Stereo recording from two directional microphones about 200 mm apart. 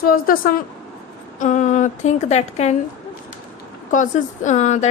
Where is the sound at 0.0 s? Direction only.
45° left (ahead or behind).